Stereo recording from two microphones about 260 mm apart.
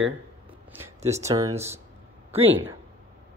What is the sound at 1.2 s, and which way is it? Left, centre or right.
Speech, centre.